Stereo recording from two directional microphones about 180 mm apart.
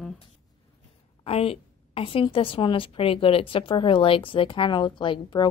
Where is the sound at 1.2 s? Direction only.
35° left (ahead or behind).